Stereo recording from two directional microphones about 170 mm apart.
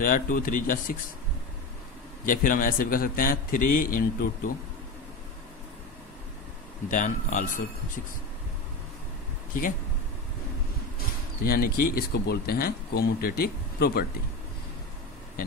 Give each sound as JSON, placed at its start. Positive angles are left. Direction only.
{"t": 0.0, "sound": "speech", "side_deg": 55}
{"t": 2.2, "sound": "speech", "side_deg": 50}
{"t": 6.9, "sound": "speech", "side_deg": 50}
{"t": 9.5, "sound": "speech", "side_deg": 50}
{"t": 11.4, "sound": "speech", "side_deg": 60}